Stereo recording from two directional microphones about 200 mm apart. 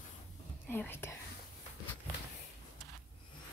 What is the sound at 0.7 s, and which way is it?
Speech, 10° left (ahead or behind).